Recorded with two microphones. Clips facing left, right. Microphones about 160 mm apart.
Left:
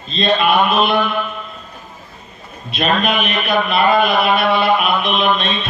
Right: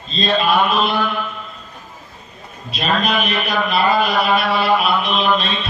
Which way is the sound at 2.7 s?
35° right (ahead or behind).